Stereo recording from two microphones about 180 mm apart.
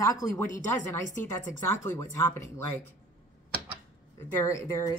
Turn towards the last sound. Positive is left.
turn(degrees=15)  # may be behind; listen again after turning